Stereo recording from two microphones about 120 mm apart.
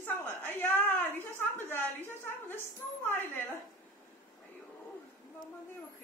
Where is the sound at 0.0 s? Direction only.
15° left (ahead or behind).